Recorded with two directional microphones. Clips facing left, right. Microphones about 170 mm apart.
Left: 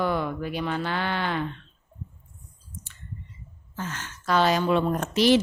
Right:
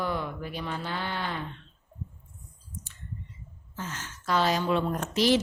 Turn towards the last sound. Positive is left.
turn(degrees=65)  # may be behind; listen again after turning